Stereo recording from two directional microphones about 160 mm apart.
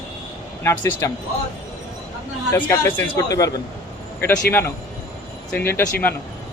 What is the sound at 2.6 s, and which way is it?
Speech, 20° left (ahead or behind).